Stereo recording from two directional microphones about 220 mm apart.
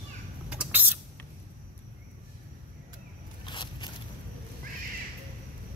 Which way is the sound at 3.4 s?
20° left (ahead or behind).